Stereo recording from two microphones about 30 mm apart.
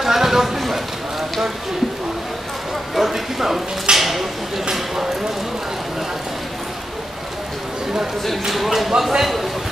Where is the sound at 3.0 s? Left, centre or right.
Centre.